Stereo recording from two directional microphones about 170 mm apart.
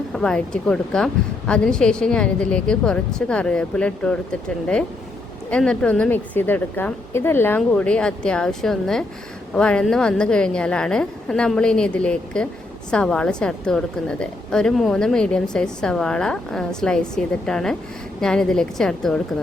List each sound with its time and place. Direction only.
0.1 s a woman's voice: 5° left (ahead or behind)